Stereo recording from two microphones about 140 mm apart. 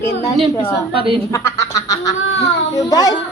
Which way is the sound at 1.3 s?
20° left (ahead or behind).